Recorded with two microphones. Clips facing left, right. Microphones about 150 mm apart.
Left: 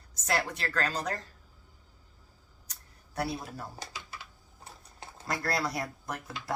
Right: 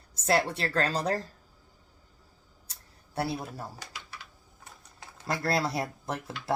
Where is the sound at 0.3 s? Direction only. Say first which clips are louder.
Right 5 dB; 30° right (ahead or behind).